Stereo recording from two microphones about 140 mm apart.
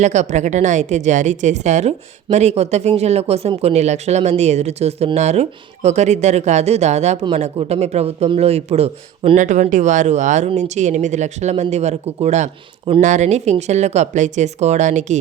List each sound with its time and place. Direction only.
0.0 s speech: 55° right (ahead or behind)